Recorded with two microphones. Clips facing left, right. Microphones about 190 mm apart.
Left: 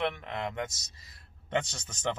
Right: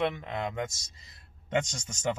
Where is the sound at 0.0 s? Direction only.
20° right (ahead or behind).